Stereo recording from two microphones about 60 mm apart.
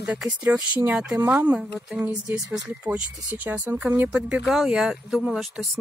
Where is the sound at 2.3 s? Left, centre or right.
Right.